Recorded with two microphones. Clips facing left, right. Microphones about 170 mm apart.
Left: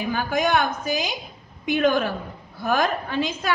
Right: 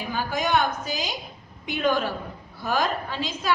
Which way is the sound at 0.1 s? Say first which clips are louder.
Left 2 dB; 55° left (ahead or behind).